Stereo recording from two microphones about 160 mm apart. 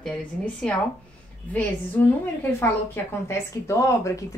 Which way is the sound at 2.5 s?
15° left (ahead or behind).